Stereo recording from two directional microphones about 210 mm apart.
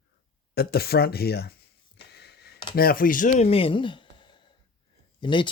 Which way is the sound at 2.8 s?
45° left (ahead or behind).